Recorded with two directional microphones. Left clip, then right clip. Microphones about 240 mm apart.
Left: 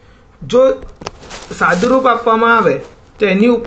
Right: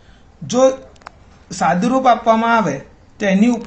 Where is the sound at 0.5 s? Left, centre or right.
Centre.